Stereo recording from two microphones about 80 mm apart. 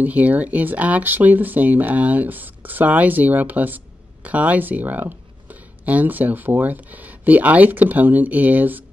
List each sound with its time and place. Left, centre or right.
0.0 s speech: right